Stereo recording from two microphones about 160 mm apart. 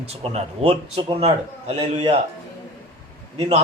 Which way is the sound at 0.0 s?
40° right (ahead or behind).